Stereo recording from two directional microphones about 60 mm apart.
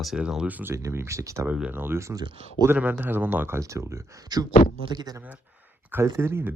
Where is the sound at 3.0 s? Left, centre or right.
Right.